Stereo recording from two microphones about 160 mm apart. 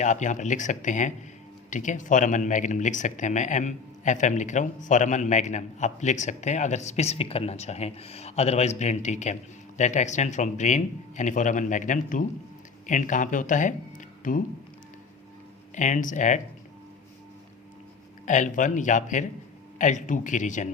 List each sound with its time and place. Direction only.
0.0 s speech: 50° left (ahead or behind)
15.7 s speech: 50° left (ahead or behind)
18.3 s speech: 50° left (ahead or behind)